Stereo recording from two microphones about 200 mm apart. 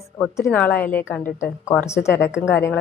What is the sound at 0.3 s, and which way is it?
Speech, 5° left (ahead or behind).